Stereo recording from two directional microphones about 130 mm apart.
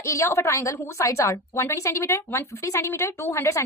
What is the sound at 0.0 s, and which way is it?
A woman's voice, 20° left (ahead or behind).